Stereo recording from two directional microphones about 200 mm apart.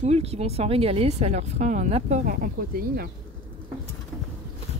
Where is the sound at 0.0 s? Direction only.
30° right (ahead or behind).